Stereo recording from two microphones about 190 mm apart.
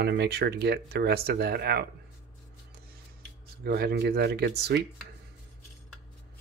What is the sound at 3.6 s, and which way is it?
Speech, 55° right (ahead or behind).